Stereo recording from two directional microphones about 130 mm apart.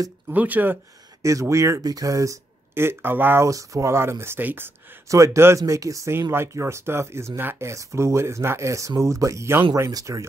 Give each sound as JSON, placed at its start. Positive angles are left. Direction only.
{"t": 0.3, "sound": "speech", "side_deg": -10}